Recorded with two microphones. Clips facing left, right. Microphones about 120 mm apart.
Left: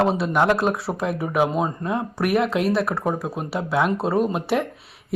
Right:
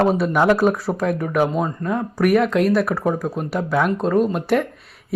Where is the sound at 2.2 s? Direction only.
Centre (ahead or behind).